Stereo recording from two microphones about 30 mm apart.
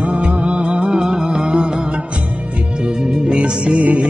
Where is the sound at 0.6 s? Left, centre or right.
Right.